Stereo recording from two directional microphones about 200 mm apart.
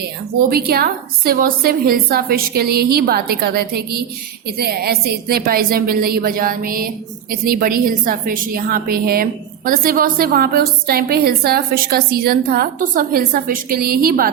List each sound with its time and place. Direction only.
0.5 s a woman's voice: 50° right (ahead or behind)